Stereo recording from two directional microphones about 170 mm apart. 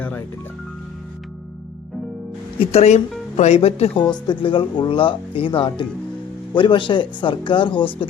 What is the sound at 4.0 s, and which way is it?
Speech, 25° left (ahead or behind).